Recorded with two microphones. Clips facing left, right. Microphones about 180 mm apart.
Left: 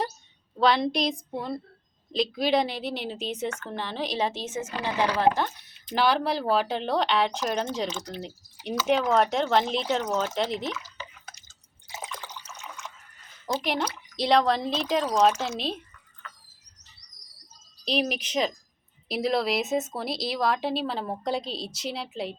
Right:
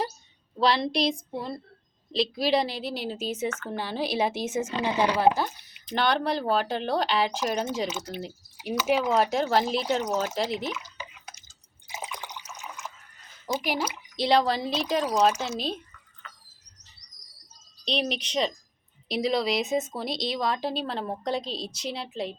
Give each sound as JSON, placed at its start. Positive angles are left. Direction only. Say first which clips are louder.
{"t": 0.5, "sound": "speech", "louder": "left 1 dB", "side_deg": 0}
{"t": 2.1, "sound": "speech", "louder": "even", "side_deg": 0}
{"t": 4.7, "sound": "speech", "louder": "even", "side_deg": -25}
{"t": 5.2, "sound": "speech", "louder": "right 1 dB", "side_deg": -5}
{"t": 10.8, "sound": "drip", "louder": "even", "side_deg": -15}
{"t": 13.6, "sound": "speech", "louder": "left 1 dB", "side_deg": -5}
{"t": 17.8, "sound": "speech", "louder": "left 2 dB", "side_deg": 5}